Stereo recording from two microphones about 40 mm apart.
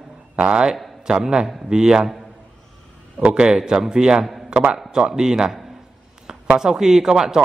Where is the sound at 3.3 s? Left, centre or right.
Centre.